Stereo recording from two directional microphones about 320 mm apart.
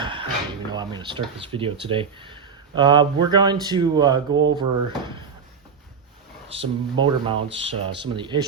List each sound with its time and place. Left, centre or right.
0.0 s dishes: centre
0.7 s speech: centre
6.5 s speech: centre